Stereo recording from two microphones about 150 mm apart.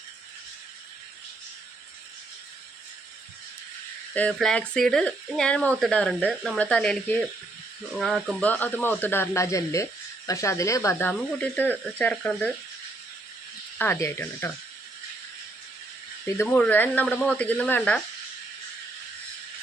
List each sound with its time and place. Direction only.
4.1 s speech: 10° left (ahead or behind)
13.7 s speech: 15° left (ahead or behind)
16.4 s speech: 10° left (ahead or behind)